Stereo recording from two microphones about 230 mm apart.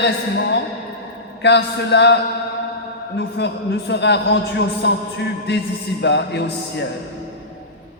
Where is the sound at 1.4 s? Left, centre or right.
Left.